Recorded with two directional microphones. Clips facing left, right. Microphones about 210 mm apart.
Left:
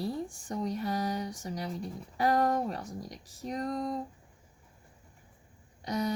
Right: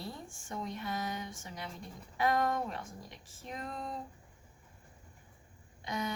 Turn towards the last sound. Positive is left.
turn(degrees=40)  # may be behind; listen again after turning